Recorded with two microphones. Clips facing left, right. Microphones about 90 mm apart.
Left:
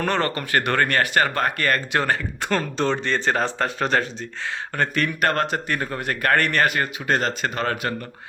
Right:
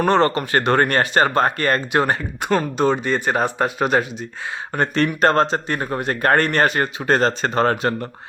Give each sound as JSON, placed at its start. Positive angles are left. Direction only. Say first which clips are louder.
{"t": 0.0, "sound": "speech", "louder": "right 7 dB", "side_deg": -20}
{"t": 4.7, "sound": "speech", "louder": "right 5 dB", "side_deg": -25}